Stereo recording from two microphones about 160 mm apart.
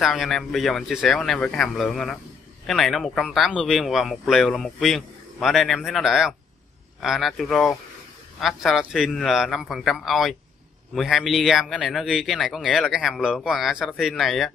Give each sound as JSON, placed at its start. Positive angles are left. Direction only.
{"t": 0.0, "sound": "speech", "side_deg": 0}